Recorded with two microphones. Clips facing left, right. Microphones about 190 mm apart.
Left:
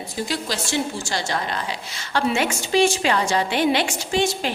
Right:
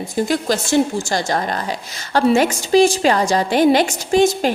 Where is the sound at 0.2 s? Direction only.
50° right (ahead or behind).